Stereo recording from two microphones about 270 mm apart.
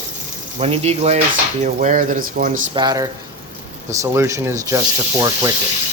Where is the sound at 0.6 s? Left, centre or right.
Right.